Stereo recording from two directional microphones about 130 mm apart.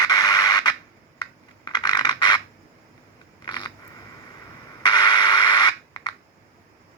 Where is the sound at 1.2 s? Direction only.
35° left (ahead or behind).